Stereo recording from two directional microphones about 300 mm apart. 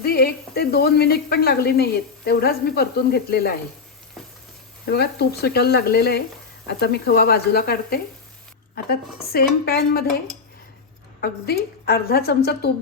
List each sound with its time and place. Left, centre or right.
0.0 s speech: left
4.9 s speech: left
11.2 s speech: left